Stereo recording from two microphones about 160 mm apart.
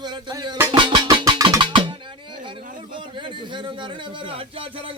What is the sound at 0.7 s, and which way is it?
Music, 30° right (ahead or behind).